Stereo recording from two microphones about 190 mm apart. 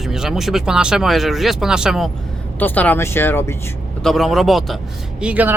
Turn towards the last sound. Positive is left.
turn(degrees=-5)  # may be behind; listen again after turning